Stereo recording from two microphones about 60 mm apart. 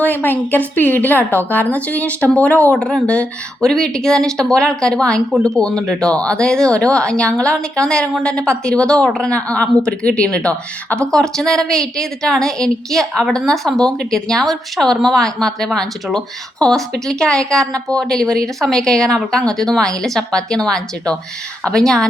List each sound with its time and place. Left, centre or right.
0.0 s a woman's voice: left
2.7 s a woman's voice: centre